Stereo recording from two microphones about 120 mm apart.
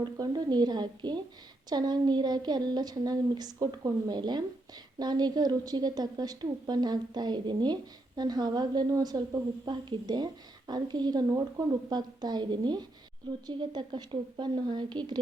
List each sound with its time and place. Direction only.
0.0 s a woman's voice: 35° right (ahead or behind)